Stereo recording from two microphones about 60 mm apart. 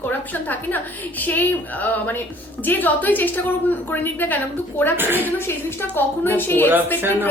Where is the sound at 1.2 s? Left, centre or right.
Left.